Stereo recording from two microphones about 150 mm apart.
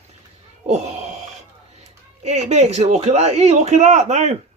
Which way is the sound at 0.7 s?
50° right (ahead or behind).